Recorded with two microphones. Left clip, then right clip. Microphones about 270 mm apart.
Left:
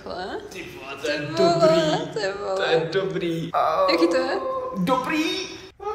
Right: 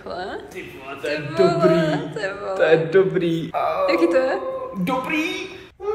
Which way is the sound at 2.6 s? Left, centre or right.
Centre.